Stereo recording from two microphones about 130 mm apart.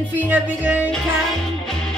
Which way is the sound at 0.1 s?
10° right (ahead or behind).